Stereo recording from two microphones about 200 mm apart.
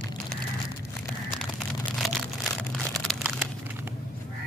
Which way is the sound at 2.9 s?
Centre (ahead or behind).